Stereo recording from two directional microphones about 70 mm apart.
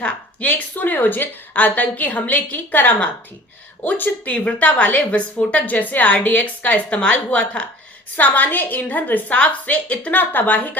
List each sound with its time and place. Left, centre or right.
0.0 s a woman's voice: left